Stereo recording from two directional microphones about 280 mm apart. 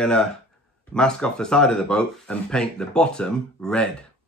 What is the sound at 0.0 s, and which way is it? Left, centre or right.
Speech, centre.